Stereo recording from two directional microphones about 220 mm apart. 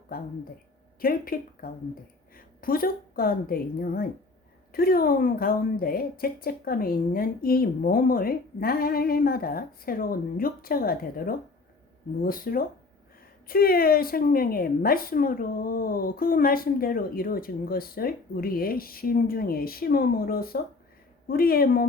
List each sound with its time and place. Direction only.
0.1 s a woman's voice: 40° left (ahead or behind)